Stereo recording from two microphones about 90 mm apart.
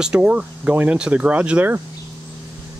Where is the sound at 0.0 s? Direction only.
10° right (ahead or behind).